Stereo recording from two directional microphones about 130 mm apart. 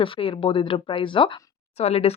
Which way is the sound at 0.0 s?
45° left (ahead or behind).